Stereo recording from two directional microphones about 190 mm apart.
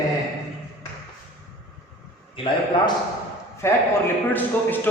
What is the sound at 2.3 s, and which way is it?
Speech, 25° left (ahead or behind).